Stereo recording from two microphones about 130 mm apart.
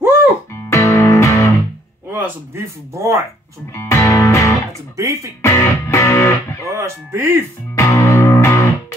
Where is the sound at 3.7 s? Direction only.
20° left (ahead or behind).